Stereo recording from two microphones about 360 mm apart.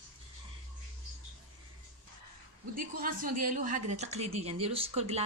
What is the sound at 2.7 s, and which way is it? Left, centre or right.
A woman's voice, right.